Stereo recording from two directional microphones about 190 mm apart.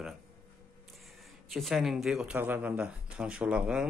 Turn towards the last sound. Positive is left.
turn(degrees=-5)  # may be behind; listen again after turning